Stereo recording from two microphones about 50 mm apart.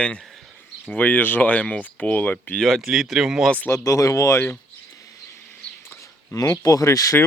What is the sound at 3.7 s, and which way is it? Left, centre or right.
Speech, left.